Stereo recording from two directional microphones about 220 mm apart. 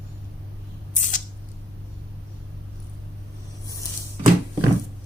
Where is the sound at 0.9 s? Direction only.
35° left (ahead or behind).